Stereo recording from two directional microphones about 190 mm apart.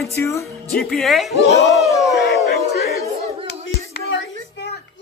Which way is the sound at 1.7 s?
Centre (ahead or behind).